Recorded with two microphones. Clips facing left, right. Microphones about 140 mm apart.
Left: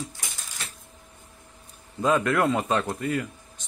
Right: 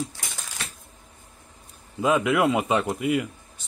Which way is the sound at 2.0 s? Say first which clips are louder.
Right 1 dB; 5° right (ahead or behind).